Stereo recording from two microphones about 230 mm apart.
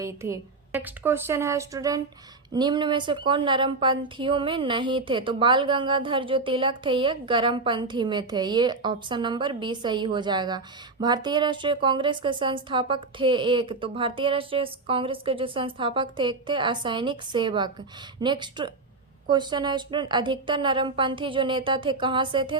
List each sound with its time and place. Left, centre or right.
0.0 s a woman's voice: centre